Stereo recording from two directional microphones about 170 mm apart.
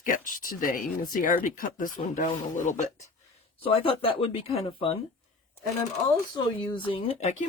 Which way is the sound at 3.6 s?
35° left (ahead or behind).